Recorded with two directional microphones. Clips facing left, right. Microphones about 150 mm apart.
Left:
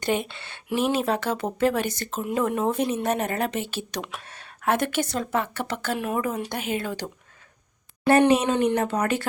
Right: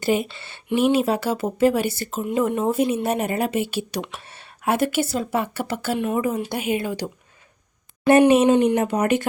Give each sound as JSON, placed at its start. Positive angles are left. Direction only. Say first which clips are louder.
{"t": 0.0, "sound": "speech", "louder": "right 4 dB", "side_deg": -5}